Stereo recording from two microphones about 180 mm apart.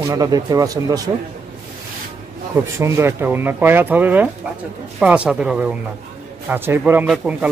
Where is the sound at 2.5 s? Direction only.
15° right (ahead or behind).